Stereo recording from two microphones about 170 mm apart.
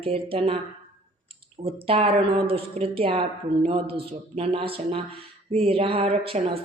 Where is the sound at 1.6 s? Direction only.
35° right (ahead or behind).